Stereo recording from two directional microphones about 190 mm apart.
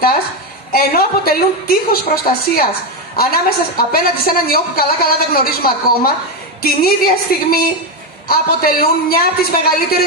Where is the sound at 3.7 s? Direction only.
50° left (ahead or behind).